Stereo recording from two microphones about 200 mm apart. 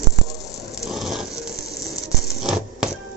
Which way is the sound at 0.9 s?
Centre (ahead or behind).